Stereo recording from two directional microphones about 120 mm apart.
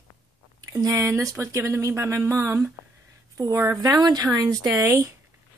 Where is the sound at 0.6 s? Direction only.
30° right (ahead or behind).